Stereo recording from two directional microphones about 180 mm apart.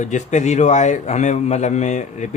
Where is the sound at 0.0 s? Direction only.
40° left (ahead or behind).